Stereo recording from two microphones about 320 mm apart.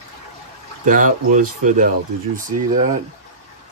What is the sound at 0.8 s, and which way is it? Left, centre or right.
Speech, right.